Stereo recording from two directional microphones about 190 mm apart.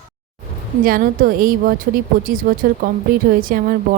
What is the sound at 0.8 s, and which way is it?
A woman's voice, 50° right (ahead or behind).